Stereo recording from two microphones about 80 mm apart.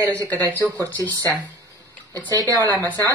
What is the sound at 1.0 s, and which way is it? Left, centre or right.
Speech, right.